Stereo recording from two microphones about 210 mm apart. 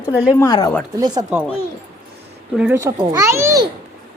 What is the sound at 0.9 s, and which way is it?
Speech, 20° right (ahead or behind).